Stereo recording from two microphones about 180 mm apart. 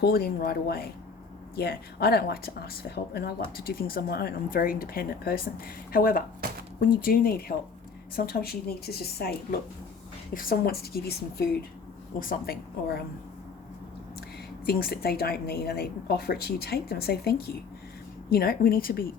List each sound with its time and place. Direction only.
0.0 s a woman's voice: 60° left (ahead or behind)
14.7 s a woman's voice: 60° left (ahead or behind)